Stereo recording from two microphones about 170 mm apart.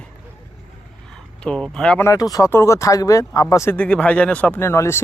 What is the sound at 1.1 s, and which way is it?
Speech, 5° left (ahead or behind).